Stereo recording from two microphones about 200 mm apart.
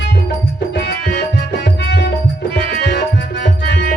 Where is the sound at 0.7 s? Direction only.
55° left (ahead or behind).